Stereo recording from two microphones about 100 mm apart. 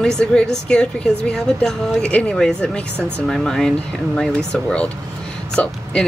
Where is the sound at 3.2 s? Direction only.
5° left (ahead or behind).